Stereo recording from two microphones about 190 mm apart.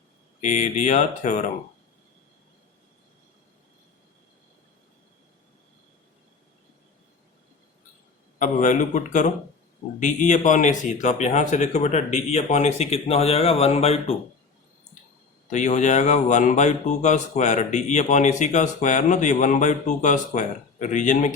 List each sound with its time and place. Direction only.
0.4 s speech: 40° left (ahead or behind)
8.4 s speech: 40° left (ahead or behind)
15.4 s speech: 40° left (ahead or behind)